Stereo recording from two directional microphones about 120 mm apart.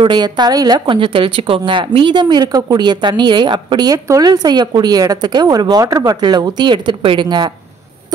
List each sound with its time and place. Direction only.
0.0 s a woman's voice: 40° right (ahead or behind)